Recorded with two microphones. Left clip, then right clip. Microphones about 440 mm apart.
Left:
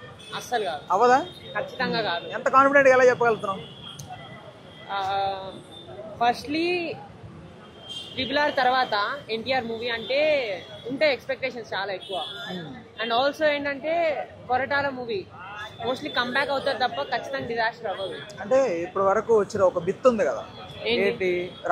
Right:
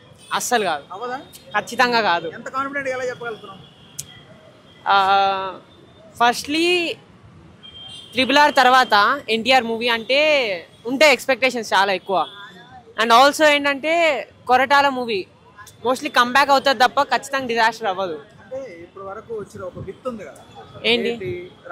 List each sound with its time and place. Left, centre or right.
0.3 s speech: right
0.9 s speech: centre
1.5 s speech: right
2.3 s a man's voice: centre
4.8 s a woman's voice: right
8.2 s a woman's voice: right
18.5 s speech: left